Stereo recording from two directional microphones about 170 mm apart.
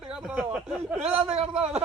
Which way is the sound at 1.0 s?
40° right (ahead or behind).